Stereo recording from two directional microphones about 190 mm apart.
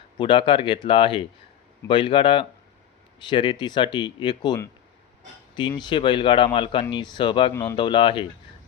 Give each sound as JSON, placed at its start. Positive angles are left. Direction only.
{"t": 0.2, "sound": "speech", "side_deg": 25}
{"t": 7.5, "sound": "speech", "side_deg": 15}
{"t": 7.8, "sound": "speech", "side_deg": 25}